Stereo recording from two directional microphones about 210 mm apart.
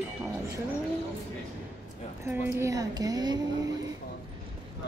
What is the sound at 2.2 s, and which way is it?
Speech, 10° right (ahead or behind).